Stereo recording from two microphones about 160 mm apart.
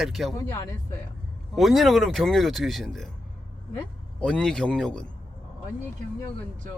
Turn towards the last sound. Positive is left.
turn(degrees=5)  # may be behind; listen again after turning